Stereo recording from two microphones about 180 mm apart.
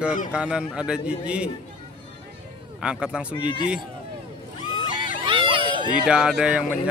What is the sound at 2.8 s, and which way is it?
Speech, 5° right (ahead or behind).